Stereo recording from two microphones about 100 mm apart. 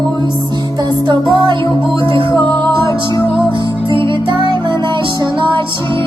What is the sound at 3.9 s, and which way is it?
Music, 55° right (ahead or behind).